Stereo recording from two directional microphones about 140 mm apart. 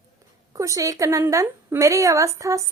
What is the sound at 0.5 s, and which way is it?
A woman's voice, 25° right (ahead or behind).